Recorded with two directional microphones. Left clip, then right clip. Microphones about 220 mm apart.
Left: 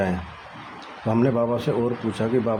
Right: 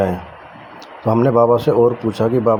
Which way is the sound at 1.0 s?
15° right (ahead or behind).